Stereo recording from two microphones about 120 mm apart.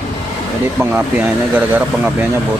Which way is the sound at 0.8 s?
15° right (ahead or behind).